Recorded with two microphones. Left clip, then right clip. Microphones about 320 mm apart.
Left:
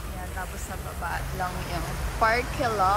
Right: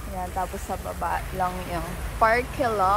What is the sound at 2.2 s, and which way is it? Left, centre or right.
Speech, right.